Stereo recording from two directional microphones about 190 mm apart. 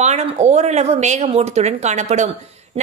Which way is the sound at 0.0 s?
35° right (ahead or behind).